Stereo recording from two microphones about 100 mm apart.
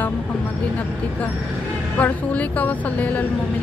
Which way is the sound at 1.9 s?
15° left (ahead or behind).